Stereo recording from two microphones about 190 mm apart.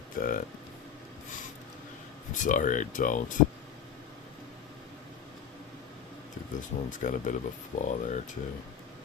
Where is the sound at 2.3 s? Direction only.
40° left (ahead or behind).